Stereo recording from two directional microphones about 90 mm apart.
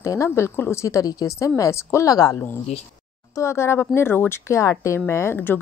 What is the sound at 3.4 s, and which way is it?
A woman's voice, 30° left (ahead or behind).